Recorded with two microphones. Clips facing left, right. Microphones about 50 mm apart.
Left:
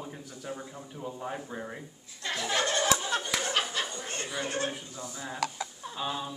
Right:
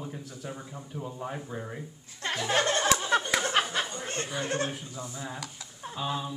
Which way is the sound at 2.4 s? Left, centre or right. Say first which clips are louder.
Right 2 dB; right.